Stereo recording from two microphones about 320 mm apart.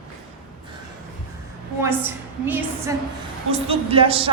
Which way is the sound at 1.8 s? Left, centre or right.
Centre.